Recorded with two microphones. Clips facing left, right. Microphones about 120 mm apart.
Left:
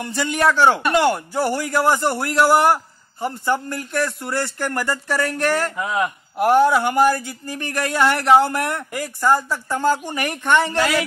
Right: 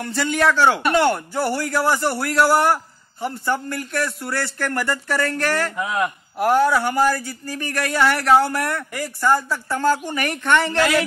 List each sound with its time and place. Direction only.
0.0 s speech: 15° left (ahead or behind)
5.8 s a man's voice: centre (ahead or behind)
6.3 s speech: 15° left (ahead or behind)